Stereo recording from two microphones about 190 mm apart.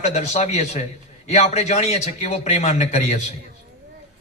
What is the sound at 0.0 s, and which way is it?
A man's voice, 35° left (ahead or behind).